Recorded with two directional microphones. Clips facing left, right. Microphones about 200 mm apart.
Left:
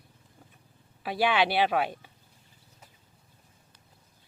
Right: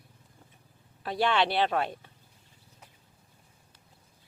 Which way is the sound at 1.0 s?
5° left (ahead or behind).